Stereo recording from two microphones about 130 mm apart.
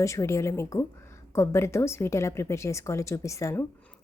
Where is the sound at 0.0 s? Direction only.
25° left (ahead or behind).